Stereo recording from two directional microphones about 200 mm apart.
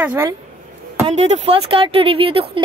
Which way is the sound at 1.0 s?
35° right (ahead or behind).